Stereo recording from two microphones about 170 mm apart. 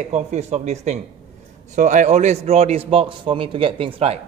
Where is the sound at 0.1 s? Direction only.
40° right (ahead or behind).